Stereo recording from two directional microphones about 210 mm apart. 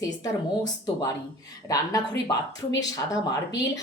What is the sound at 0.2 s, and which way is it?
A woman's voice, 20° left (ahead or behind).